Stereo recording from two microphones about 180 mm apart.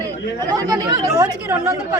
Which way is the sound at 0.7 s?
20° right (ahead or behind).